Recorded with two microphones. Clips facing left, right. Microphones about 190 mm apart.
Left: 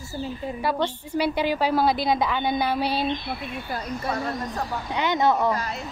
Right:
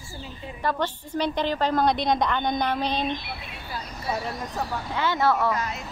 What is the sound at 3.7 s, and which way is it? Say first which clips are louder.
Speech: left 3 dB; 50° left (ahead or behind).